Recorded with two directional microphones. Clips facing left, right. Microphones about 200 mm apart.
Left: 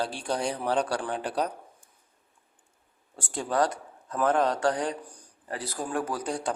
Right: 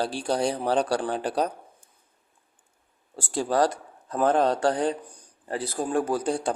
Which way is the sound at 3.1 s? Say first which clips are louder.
Right 3 dB; 35° right (ahead or behind).